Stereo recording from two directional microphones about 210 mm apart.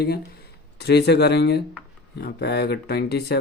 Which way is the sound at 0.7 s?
50° left (ahead or behind).